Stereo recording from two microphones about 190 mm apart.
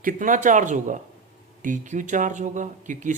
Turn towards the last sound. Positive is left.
turn(degrees=-40)  # may be behind; listen again after turning